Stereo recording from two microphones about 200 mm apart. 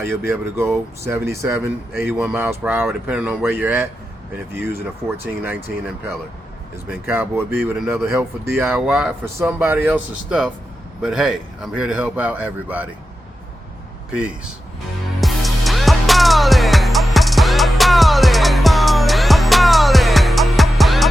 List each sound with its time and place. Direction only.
1.0 s speech: 15° right (ahead or behind)
7.1 s speech: 10° right (ahead or behind)
14.1 s speech: 5° right (ahead or behind)
15.2 s music: centre (ahead or behind)